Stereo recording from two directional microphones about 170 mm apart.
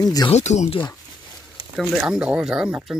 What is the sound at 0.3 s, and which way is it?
Speech, 45° left (ahead or behind).